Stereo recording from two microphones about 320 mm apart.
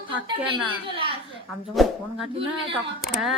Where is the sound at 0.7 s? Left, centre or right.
Centre.